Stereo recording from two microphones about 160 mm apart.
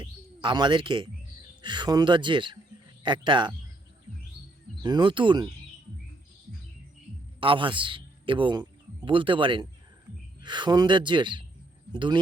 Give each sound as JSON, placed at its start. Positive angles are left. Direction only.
{"t": 0.0, "sound": "speech", "side_deg": -30}
{"t": 4.8, "sound": "speech", "side_deg": -25}
{"t": 7.3, "sound": "a man's voice", "side_deg": -30}